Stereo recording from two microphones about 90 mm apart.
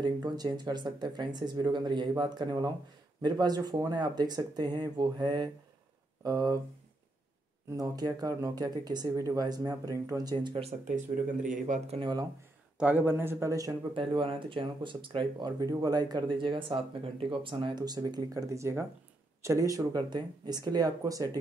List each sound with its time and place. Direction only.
0.0 s speech: 50° right (ahead or behind)
6.2 s speech: 45° right (ahead or behind)
7.7 s speech: 45° right (ahead or behind)
12.7 s a man's voice: 20° right (ahead or behind); by 13.7 s 40° right (ahead or behind)
13.9 s speech: 70° right (ahead or behind)
15.6 s speech: 40° right (ahead or behind)